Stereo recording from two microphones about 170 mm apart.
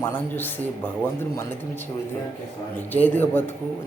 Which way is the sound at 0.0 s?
10° left (ahead or behind).